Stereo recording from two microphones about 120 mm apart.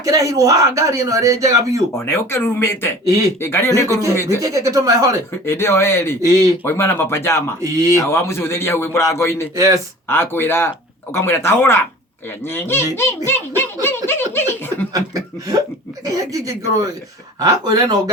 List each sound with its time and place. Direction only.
0.0 s speech: 30° right (ahead or behind)
2.0 s a man's voice: 20° left (ahead or behind)
4.4 s speech: 30° right (ahead or behind)
5.5 s a man's voice: 20° left (ahead or behind)
6.2 s speech: 25° right (ahead or behind)
6.7 s a man's voice: 20° left (ahead or behind)
7.6 s speech: 25° right (ahead or behind)
7.9 s a man's voice: 20° left (ahead or behind)
9.6 s speech: 25° right (ahead or behind)
10.1 s a man's voice: 20° left (ahead or behind)
13.8 s snicker: 20° left (ahead or behind)
14.9 s speech: 30° right (ahead or behind)